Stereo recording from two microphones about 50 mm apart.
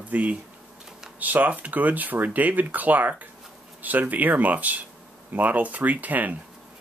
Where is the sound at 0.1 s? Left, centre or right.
Right.